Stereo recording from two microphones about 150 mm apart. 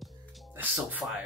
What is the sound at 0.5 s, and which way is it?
Music, 10° right (ahead or behind).